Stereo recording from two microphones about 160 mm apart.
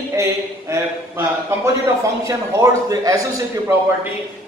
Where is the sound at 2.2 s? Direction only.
20° right (ahead or behind).